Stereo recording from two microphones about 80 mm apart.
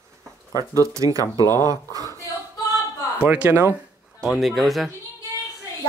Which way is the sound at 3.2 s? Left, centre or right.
Centre.